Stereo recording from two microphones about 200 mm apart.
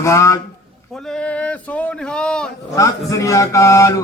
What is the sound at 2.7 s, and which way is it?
Speech, 15° left (ahead or behind).